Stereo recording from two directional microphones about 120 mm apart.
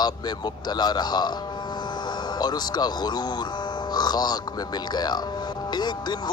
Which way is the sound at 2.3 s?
35° left (ahead or behind).